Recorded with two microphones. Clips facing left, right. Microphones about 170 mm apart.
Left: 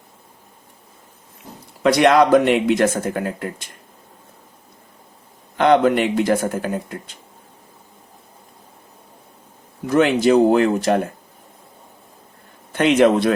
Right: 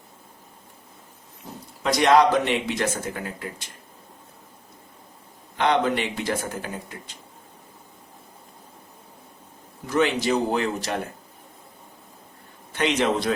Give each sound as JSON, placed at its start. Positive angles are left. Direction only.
{"t": 1.8, "sound": "speech", "side_deg": 65}
{"t": 5.5, "sound": "speech", "side_deg": 50}
{"t": 9.9, "sound": "speech", "side_deg": 55}
{"t": 12.7, "sound": "speech", "side_deg": 55}